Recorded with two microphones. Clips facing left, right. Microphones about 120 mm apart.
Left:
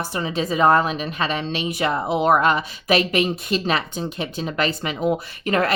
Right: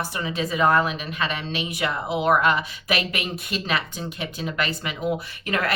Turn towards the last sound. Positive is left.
turn(degrees=35)  # may be behind; listen again after turning